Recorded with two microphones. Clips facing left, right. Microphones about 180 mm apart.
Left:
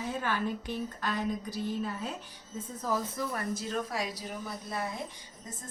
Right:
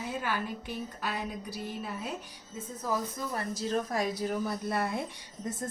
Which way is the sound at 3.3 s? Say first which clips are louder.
Right 5 dB; 35° right (ahead or behind).